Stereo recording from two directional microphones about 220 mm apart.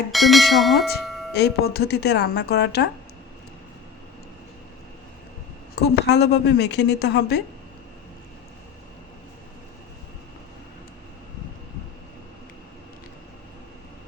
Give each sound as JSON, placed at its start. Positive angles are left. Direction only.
{"t": 0.1, "sound": "speech", "side_deg": 0}
{"t": 1.3, "sound": "a woman's voice", "side_deg": 45}
{"t": 5.7, "sound": "a woman's voice", "side_deg": 50}